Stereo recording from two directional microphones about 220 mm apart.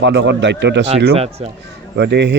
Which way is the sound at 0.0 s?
55° right (ahead or behind).